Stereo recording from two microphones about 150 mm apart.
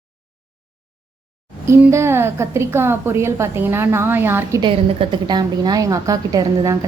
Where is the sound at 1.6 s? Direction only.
20° right (ahead or behind).